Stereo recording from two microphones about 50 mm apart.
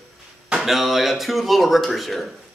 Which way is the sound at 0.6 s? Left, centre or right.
Centre.